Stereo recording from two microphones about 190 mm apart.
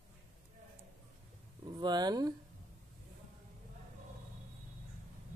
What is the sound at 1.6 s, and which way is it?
Speech, 20° right (ahead or behind).